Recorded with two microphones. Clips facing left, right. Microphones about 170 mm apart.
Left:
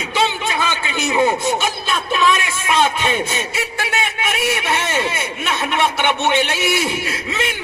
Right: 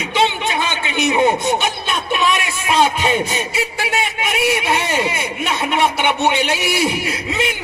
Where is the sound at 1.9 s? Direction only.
20° right (ahead or behind).